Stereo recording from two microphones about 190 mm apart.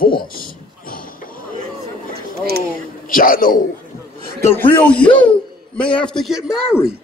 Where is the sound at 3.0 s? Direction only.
45° left (ahead or behind).